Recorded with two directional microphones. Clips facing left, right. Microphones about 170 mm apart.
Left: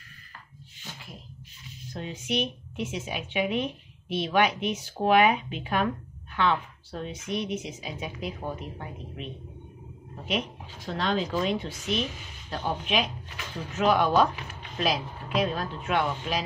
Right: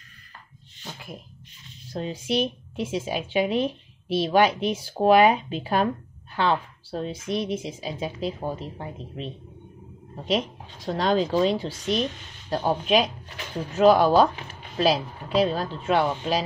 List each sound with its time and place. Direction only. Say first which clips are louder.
1.9 s a woman's voice: right 5 dB; 35° right (ahead or behind)